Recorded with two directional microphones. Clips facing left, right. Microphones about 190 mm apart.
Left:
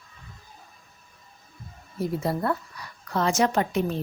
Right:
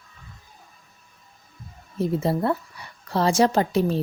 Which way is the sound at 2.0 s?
25° right (ahead or behind).